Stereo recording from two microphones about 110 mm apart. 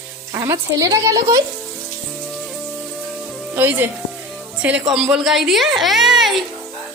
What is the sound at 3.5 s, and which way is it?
A woman's voice, 15° right (ahead or behind).